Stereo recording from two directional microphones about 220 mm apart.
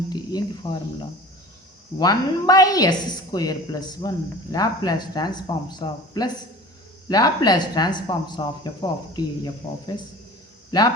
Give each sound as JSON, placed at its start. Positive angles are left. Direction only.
{"t": 0.1, "sound": "speech", "side_deg": 15}
{"t": 2.0, "sound": "a woman's voice", "side_deg": 15}